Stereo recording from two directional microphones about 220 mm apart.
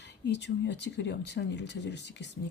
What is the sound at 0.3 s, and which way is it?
Speech, 50° left (ahead or behind).